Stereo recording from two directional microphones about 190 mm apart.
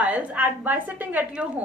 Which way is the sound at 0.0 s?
10° right (ahead or behind).